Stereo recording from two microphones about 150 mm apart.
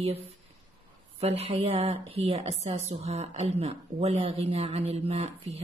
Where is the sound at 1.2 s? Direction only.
45° right (ahead or behind).